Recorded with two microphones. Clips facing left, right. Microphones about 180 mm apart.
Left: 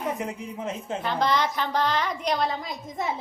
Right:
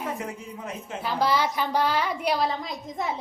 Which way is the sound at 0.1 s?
20° left (ahead or behind).